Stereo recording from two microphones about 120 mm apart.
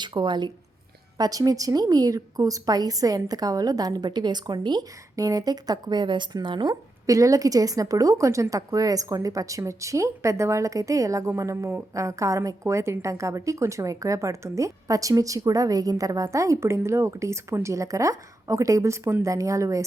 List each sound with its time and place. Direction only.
0.0 s a woman's voice: 40° right (ahead or behind)